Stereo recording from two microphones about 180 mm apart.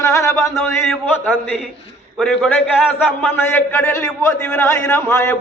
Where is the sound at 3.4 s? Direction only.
15° left (ahead or behind).